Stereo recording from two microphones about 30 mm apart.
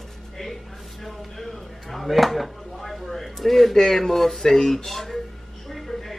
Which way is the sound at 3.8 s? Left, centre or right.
Centre.